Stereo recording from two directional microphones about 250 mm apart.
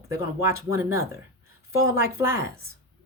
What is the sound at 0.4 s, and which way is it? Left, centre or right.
Speech, centre.